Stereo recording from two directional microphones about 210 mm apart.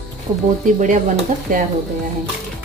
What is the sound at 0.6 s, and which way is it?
Speech, 35° right (ahead or behind).